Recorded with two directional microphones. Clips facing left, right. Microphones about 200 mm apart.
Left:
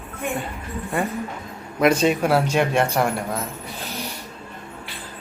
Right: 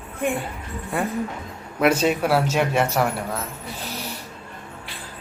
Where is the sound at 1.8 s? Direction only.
5° right (ahead or behind).